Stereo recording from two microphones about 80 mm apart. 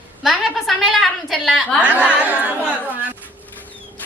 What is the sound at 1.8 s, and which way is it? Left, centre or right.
Speech, centre.